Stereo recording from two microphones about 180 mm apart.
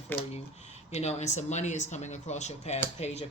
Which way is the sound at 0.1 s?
10° left (ahead or behind).